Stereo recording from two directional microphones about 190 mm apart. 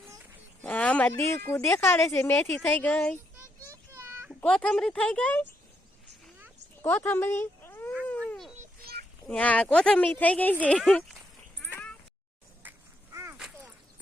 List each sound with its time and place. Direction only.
0.6 s speech: 5° left (ahead or behind)
3.3 s child singing: 15° right (ahead or behind)
4.4 s speech: 5° left (ahead or behind)
6.8 s speech: 10° left (ahead or behind)
8.0 s a sound: 10° left (ahead or behind)
8.8 s a sound: 55° right (ahead or behind)
9.2 s speech: 5° left (ahead or behind)
11.6 s cat: 5° left (ahead or behind)